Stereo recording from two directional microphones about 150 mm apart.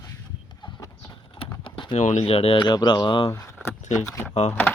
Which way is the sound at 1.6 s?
35° left (ahead or behind).